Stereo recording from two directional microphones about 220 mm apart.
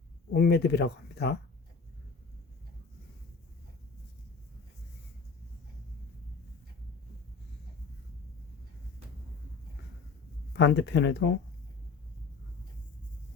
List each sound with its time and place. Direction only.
0.3 s speech: 45° left (ahead or behind)
10.5 s speech: 50° left (ahead or behind)